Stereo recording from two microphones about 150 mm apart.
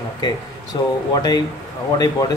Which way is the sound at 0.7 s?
30° left (ahead or behind).